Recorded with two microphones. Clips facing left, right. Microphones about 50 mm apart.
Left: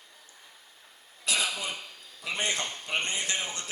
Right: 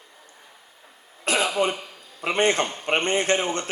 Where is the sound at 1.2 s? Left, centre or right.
Right.